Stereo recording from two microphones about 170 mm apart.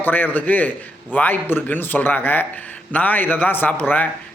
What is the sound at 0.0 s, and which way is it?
A man's voice, 10° left (ahead or behind).